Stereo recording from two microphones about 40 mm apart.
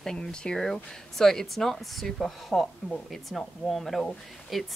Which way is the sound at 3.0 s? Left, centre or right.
Centre.